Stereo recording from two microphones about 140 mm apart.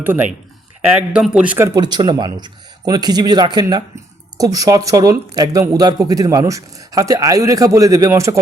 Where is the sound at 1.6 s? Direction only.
30° right (ahead or behind).